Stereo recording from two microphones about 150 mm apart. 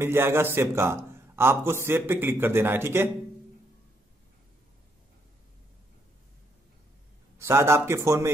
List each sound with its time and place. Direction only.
0.0 s a man's voice: 15° right (ahead or behind)
7.3 s a man's voice: 15° right (ahead or behind)